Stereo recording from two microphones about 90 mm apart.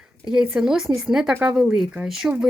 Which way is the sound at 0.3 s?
5° right (ahead or behind).